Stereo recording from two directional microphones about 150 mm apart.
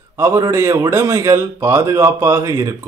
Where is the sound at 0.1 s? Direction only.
20° right (ahead or behind).